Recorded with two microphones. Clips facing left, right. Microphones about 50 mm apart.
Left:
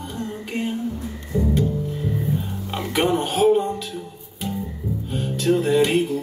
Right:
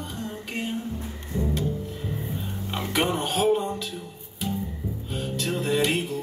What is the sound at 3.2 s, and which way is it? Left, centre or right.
Music, centre.